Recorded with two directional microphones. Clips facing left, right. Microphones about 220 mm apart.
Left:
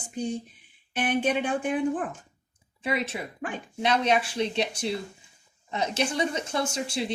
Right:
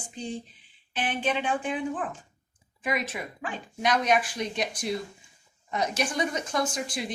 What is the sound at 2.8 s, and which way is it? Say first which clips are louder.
Speech: left 1 dB; 30° left (ahead or behind).